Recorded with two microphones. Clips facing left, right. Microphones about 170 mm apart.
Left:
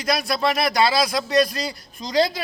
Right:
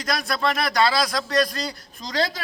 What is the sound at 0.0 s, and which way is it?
A man's voice, 10° left (ahead or behind).